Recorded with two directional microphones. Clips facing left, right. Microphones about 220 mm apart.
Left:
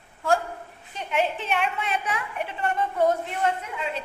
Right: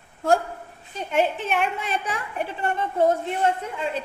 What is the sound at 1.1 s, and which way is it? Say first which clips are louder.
Speech: right 3 dB; 50° right (ahead or behind).